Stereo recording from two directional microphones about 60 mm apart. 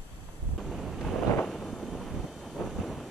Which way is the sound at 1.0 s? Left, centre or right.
Centre.